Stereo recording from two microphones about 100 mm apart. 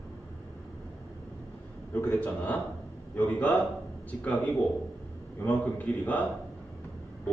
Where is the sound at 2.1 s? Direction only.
15° left (ahead or behind).